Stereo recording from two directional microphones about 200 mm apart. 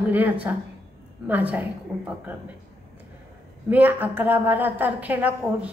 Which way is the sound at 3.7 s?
10° right (ahead or behind).